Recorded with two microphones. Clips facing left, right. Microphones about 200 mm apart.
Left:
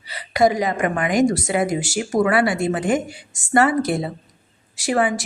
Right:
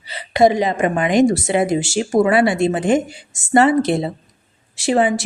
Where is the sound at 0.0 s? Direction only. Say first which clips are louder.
Right 3 dB; 25° right (ahead or behind).